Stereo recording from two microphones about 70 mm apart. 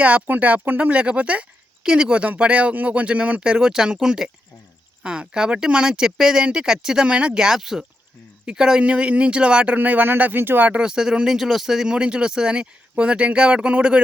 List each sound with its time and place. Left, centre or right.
0.0 s speech: right
10.8 s speech: centre